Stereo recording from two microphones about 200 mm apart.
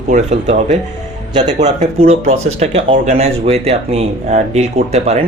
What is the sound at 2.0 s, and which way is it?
Speech, 30° right (ahead or behind).